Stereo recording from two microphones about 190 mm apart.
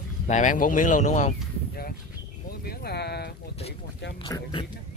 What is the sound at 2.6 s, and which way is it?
Speech, 55° left (ahead or behind).